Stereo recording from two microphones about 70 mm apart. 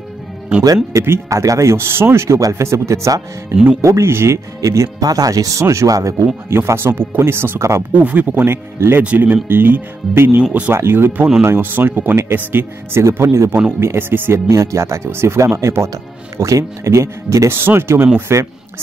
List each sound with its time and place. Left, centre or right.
1.0 s speech: right
1.4 s speech: right
4.6 s speech: right
6.5 s speech: right
7.9 s speech: right
8.7 s speech: right
9.0 s speech: right
10.7 s speech: right
14.5 s speech: right
17.6 s speech: right